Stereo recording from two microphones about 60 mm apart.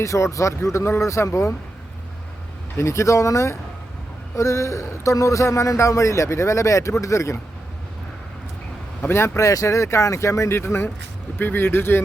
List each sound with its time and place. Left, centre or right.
0.0 s a man's voice: left
2.7 s a man's voice: left
9.0 s a man's voice: left